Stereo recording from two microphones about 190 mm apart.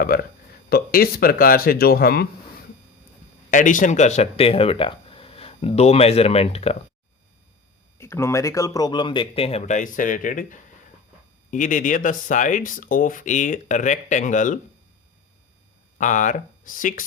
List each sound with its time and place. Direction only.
0.0 s speech: 50° left (ahead or behind)
3.5 s speech: 45° left (ahead or behind)
7.9 s speech: 15° left (ahead or behind); by 14.6 s 40° left (ahead or behind)
16.0 s speech: 40° left (ahead or behind)